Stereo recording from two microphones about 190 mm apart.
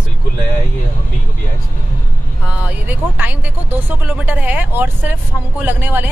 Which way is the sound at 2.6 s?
10° right (ahead or behind).